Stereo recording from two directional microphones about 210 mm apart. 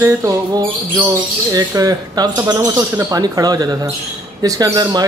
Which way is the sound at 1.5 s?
15° right (ahead or behind).